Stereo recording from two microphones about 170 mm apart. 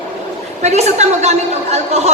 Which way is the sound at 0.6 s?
40° right (ahead or behind).